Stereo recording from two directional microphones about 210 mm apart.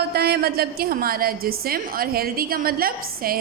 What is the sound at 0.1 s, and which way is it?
A woman's voice, 50° right (ahead or behind).